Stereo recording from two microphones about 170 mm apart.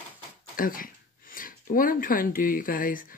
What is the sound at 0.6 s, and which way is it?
Speech, 55° left (ahead or behind).